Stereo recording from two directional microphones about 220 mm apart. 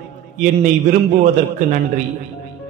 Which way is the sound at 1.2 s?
35° right (ahead or behind).